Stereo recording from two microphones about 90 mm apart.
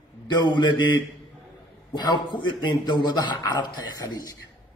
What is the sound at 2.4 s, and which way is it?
A man's voice, 55° left (ahead or behind).